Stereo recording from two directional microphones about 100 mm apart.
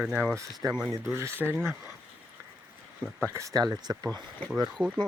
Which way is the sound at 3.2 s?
30° right (ahead or behind).